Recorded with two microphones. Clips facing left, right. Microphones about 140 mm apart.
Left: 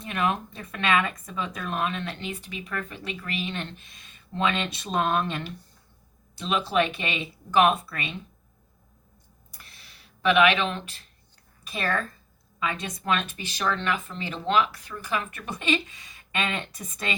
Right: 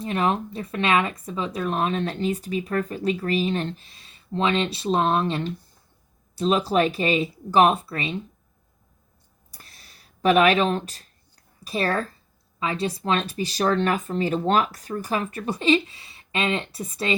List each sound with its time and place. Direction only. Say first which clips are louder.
0.0 s speech: right 4 dB; 30° right (ahead or behind)
9.5 s a sound: right 2 dB; 35° right (ahead or behind)
11.6 s speech: right 4 dB; 35° right (ahead or behind)